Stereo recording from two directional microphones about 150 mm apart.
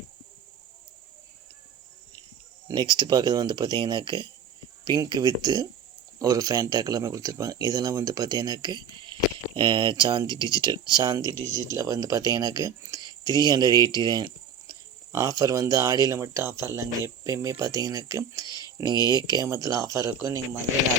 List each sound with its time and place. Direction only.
2.6 s speech: 30° right (ahead or behind)